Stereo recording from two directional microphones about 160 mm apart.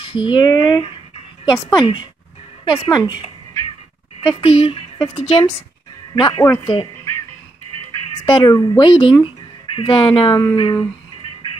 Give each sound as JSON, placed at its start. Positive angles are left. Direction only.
{"t": 0.0, "sound": "speech", "side_deg": 30}
{"t": 4.2, "sound": "speech", "side_deg": 30}
{"t": 8.3, "sound": "speech", "side_deg": 25}